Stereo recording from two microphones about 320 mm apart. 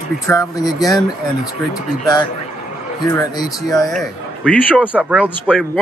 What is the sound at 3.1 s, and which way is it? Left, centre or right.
A man's voice, centre.